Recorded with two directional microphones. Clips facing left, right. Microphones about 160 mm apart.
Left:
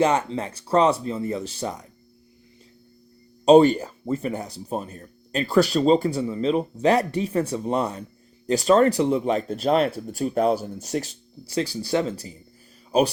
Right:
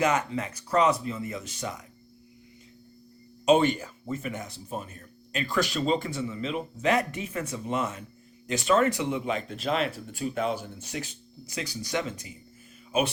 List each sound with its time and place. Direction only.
0.0 s speech: 30° left (ahead or behind)
3.4 s speech: 35° left (ahead or behind)